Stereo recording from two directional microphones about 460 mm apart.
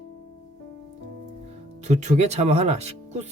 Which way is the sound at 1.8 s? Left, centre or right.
Centre.